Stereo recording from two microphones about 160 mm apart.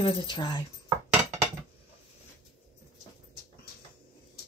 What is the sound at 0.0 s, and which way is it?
Speech, 25° left (ahead or behind).